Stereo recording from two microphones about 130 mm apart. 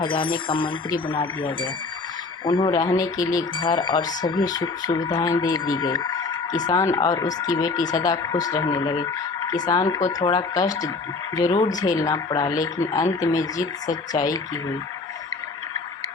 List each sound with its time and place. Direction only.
0.0 s speech: 40° left (ahead or behind)
3.6 s speech: 35° left (ahead or behind)